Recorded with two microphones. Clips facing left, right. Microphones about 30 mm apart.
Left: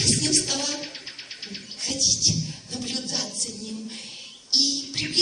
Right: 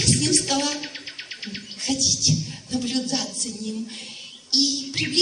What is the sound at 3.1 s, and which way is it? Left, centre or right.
Music, right.